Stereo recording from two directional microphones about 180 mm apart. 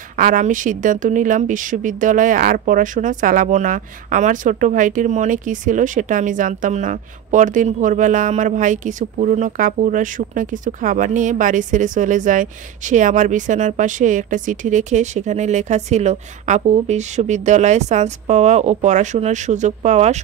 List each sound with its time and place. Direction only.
0.2 s speech: 45° right (ahead or behind)